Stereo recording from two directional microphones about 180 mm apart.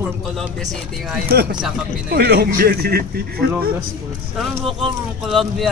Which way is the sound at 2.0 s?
60° right (ahead or behind).